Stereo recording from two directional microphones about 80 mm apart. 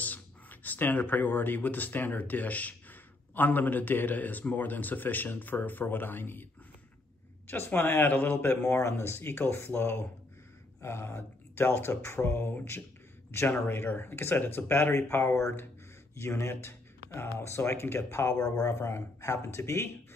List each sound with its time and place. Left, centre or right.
0.0 s speech: left
7.4 s speech: left